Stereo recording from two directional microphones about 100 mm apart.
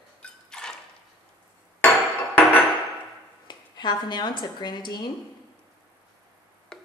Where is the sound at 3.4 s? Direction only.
45° left (ahead or behind).